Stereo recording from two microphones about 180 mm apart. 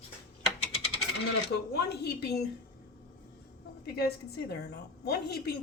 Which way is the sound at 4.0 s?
60° left (ahead or behind).